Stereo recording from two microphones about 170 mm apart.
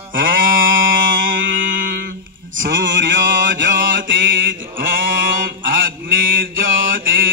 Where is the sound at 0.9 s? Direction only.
90° right.